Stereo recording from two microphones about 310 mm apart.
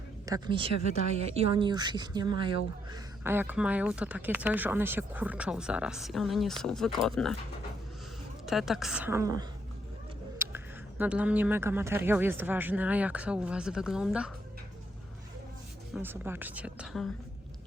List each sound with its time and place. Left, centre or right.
0.3 s speech: centre
8.4 s speech: centre
16.0 s speech: centre